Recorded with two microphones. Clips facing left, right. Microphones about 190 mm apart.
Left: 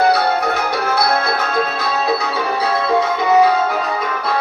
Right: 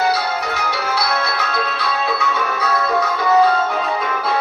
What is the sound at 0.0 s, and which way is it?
Music, 60° left (ahead or behind).